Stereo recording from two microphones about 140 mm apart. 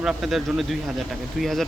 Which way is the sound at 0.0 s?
5° right (ahead or behind).